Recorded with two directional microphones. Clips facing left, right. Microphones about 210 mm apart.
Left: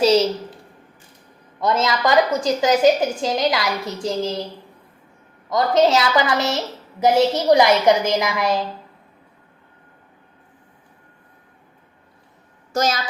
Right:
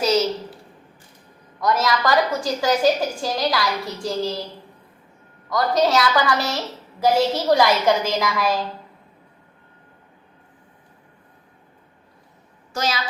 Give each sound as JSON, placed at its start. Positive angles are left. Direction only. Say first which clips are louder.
{"t": 0.0, "sound": "a woman's voice", "louder": "left 4 dB", "side_deg": 30}
{"t": 1.6, "sound": "a woman's voice", "louder": "left 1 dB", "side_deg": 25}
{"t": 5.5, "sound": "a woman's voice", "louder": "left 3 dB", "side_deg": 25}
{"t": 12.7, "sound": "a child's voice", "louder": "left 4 dB", "side_deg": 45}